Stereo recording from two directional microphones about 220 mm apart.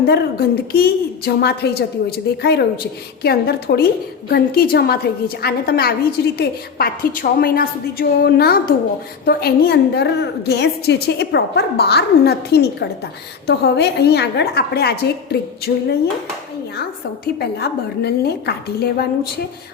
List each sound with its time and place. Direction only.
0.0 s a woman's voice: 45° left (ahead or behind)
17.4 s a woman's voice: 45° left (ahead or behind)